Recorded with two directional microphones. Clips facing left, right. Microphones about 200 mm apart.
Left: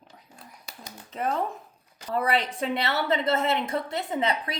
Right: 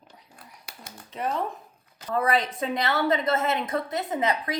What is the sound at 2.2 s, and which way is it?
A woman's voice, 30° left (ahead or behind).